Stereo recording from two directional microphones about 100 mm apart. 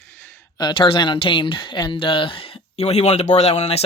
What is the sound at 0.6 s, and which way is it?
Speech, 50° left (ahead or behind).